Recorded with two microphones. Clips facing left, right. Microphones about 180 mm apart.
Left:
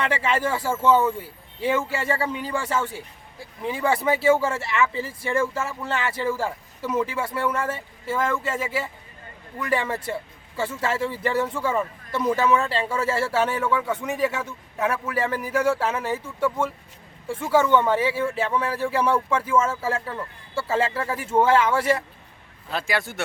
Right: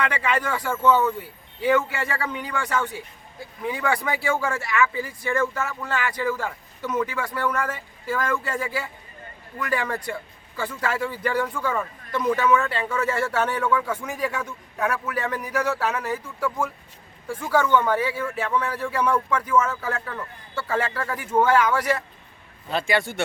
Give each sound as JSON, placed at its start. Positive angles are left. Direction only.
{"t": 0.0, "sound": "speech", "side_deg": 25}
{"t": 22.7, "sound": "speech", "side_deg": 0}